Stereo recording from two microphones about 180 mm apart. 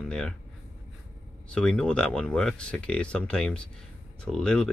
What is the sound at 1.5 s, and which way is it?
Speech, 5° left (ahead or behind).